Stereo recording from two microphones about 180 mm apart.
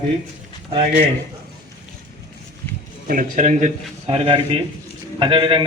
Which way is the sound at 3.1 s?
45° right (ahead or behind).